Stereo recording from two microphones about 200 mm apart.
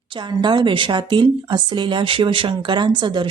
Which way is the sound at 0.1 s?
25° right (ahead or behind).